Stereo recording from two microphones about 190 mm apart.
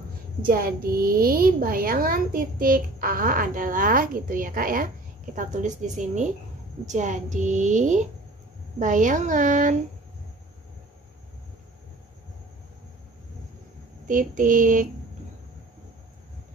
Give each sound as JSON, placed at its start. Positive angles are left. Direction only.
{"t": 0.4, "sound": "a woman's voice", "side_deg": -50}
{"t": 14.0, "sound": "a woman's voice", "side_deg": -45}